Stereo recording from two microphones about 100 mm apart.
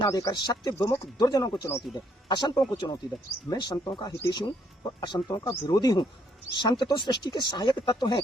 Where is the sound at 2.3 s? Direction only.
45° left (ahead or behind).